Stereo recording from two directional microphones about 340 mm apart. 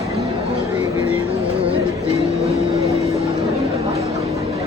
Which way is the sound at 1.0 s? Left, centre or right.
Centre.